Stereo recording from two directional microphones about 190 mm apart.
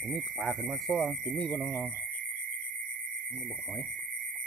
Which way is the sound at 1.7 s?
10° left (ahead or behind).